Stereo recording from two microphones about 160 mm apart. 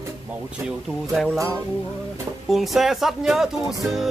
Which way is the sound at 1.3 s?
20° right (ahead or behind).